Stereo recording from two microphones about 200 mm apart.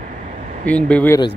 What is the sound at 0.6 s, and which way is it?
Speech, 5° left (ahead or behind).